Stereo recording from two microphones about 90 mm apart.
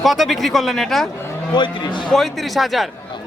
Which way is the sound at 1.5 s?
60° left (ahead or behind).